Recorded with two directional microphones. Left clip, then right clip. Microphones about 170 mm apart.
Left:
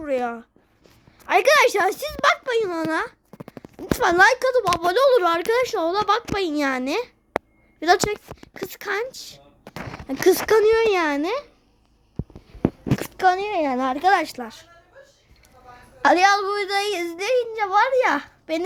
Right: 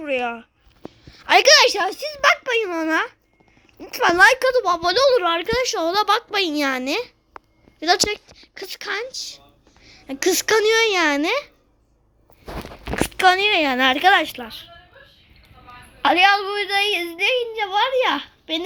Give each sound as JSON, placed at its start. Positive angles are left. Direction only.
{"t": 0.0, "sound": "speech", "side_deg": 10}
{"t": 1.1, "sound": "a woman's voice", "side_deg": 0}
{"t": 4.0, "sound": "a woman's voice", "side_deg": 10}
{"t": 4.8, "sound": "a woman's voice", "side_deg": 15}
{"t": 7.8, "sound": "speech", "side_deg": 20}
{"t": 10.1, "sound": "a woman's voice", "side_deg": 25}
{"t": 13.1, "sound": "a woman's voice", "side_deg": 0}
{"t": 16.0, "sound": "speech", "side_deg": 25}